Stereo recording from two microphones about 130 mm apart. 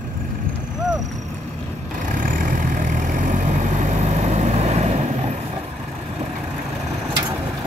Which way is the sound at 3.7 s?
60° right (ahead or behind).